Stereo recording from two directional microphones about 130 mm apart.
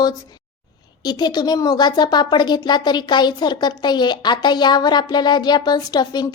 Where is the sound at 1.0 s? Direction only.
35° left (ahead or behind).